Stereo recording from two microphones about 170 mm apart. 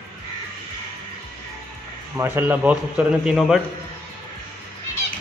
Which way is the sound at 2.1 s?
15° right (ahead or behind).